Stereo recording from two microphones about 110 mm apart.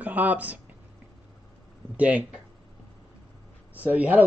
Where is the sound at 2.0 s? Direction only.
10° right (ahead or behind).